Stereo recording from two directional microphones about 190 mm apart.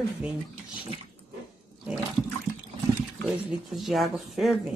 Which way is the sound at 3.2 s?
Centre (ahead or behind).